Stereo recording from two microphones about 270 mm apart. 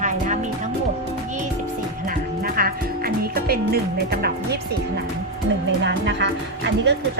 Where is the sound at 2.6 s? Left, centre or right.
Right.